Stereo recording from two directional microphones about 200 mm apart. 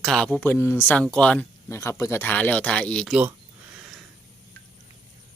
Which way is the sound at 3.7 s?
5° right (ahead or behind).